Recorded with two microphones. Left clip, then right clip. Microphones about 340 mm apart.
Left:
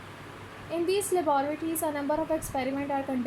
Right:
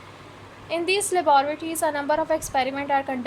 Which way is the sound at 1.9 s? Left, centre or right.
Right.